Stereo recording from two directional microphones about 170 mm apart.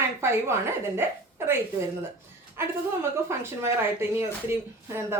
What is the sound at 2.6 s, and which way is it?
Speech, 15° right (ahead or behind).